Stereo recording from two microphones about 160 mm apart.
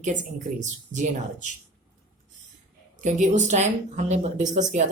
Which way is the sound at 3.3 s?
45° right (ahead or behind).